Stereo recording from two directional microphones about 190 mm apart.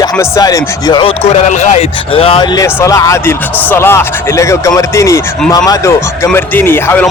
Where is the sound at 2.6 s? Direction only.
15° left (ahead or behind).